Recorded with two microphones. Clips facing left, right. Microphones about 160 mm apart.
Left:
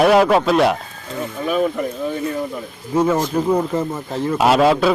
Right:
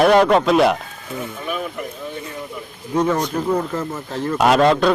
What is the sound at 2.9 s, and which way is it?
Speech, 5° left (ahead or behind).